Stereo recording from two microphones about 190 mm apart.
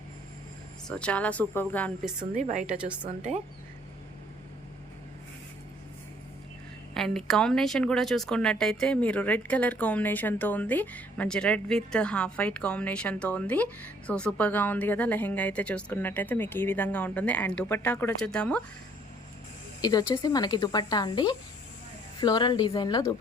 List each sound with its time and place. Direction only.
0.9 s speech: 5° left (ahead or behind)
2.3 s a woman's voice: 40° right (ahead or behind)
6.9 s speech: 5° left (ahead or behind)
19.8 s speech: 20° left (ahead or behind)